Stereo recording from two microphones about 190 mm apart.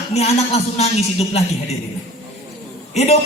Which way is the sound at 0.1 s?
35° left (ahead or behind).